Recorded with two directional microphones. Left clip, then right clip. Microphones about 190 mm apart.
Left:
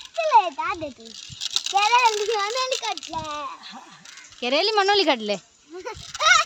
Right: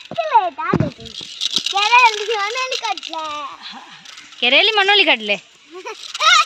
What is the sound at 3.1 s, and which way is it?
Speech, 25° left (ahead or behind).